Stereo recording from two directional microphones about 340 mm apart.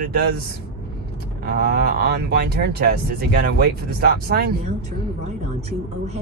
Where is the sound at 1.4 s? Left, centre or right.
Right.